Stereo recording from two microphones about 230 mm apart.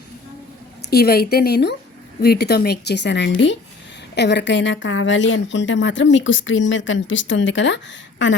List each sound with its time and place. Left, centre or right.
0.8 s speech: left